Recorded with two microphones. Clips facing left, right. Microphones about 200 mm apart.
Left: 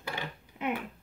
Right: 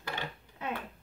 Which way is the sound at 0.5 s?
15° left (ahead or behind).